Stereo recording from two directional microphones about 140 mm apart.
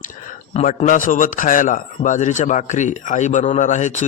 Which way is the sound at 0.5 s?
55° left (ahead or behind).